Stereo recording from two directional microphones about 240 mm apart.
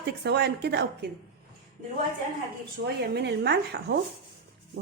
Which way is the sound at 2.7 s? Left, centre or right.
Right.